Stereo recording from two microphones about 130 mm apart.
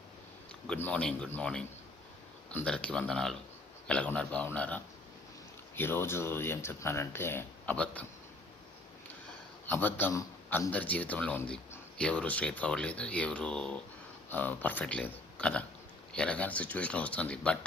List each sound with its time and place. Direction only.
0.7 s speech: 10° left (ahead or behind)
9.6 s a man's voice: 15° left (ahead or behind)
10.7 s speech: 10° left (ahead or behind)